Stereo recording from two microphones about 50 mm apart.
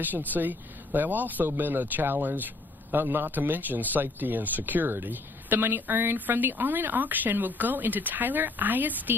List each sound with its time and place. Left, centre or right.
0.0 s speech: right